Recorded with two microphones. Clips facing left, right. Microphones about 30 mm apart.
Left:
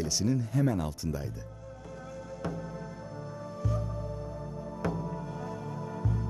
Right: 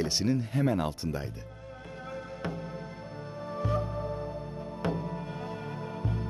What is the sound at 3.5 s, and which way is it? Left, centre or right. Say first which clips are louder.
Music: right 5 dB; right.